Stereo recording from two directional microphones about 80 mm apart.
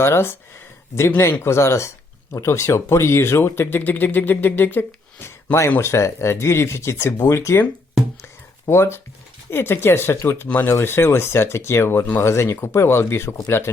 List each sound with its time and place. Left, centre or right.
0.0 s speech: left
5.8 s speech: left
8.2 s a sound: left
9.5 s speech: left